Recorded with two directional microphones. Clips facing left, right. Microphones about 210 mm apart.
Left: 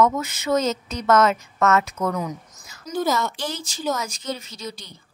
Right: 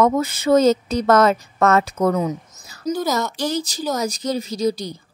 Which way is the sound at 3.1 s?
40° right (ahead or behind).